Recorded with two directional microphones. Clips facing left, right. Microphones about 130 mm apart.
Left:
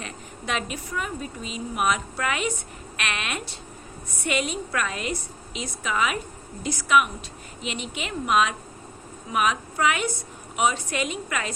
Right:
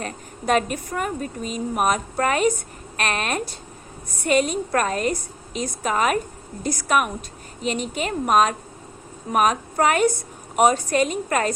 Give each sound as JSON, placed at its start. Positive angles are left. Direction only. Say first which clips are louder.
{"t": 0.0, "sound": "a woman's voice", "louder": "right 7 dB", "side_deg": -45}